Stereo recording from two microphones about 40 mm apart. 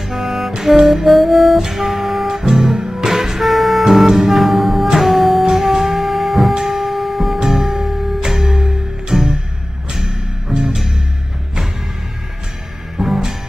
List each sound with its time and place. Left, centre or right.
0.1 s music: centre
5.5 s music: centre
5.9 s music: centre
7.3 s music: centre
10.5 s music: centre
12.9 s music: centre